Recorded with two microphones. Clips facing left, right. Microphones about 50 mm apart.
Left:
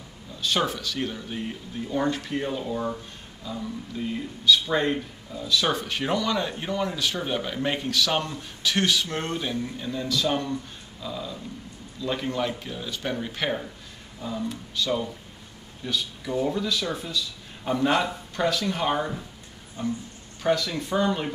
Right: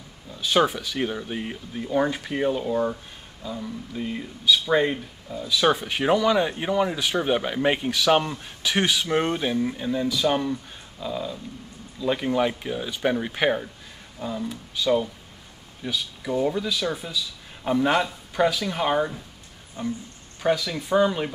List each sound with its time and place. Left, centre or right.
0.6 s speech: centre
20.4 s speech: centre